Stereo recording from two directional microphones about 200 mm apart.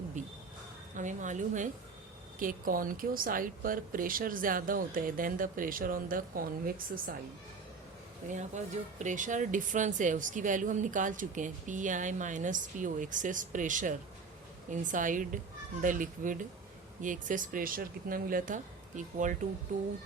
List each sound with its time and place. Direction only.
0.2 s insect: 40° right (ahead or behind)
0.9 s speech: 40° right (ahead or behind)
8.3 s speech: 35° right (ahead or behind)